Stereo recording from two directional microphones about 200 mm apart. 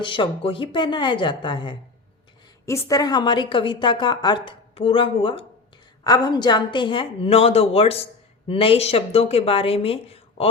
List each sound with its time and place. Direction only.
0.0 s a woman's voice: 25° left (ahead or behind)